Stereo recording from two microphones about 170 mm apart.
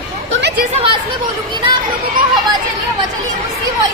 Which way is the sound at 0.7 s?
35° right (ahead or behind).